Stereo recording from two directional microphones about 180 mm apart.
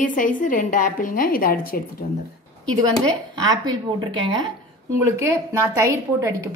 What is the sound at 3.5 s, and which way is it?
A woman's voice, 20° right (ahead or behind).